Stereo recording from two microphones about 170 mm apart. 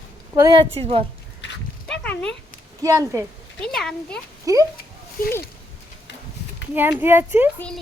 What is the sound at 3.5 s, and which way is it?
Speech, 5° left (ahead or behind).